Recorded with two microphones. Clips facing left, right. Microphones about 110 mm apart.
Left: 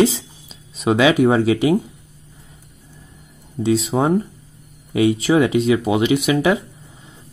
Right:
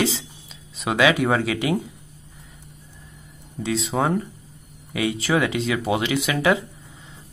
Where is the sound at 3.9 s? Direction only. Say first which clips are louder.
Left 5 dB; 30° left (ahead or behind).